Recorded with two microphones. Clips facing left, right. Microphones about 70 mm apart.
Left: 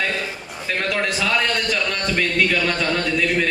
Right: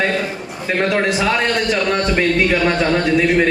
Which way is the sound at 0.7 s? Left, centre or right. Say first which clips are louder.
Right 6 dB; right.